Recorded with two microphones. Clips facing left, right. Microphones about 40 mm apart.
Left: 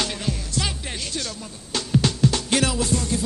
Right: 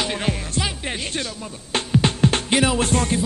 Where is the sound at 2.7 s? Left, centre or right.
Right.